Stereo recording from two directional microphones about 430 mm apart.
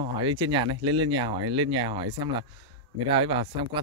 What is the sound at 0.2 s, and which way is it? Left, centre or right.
Speech, centre.